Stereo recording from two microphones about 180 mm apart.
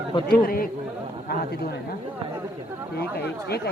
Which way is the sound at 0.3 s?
55° left (ahead or behind).